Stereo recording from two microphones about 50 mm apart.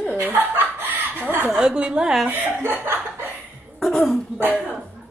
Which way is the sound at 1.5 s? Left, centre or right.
Centre.